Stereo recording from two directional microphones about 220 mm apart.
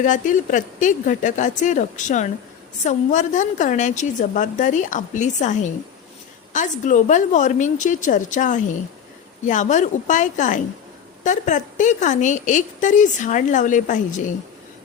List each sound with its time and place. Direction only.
0.0 s a woman's voice: 35° left (ahead or behind)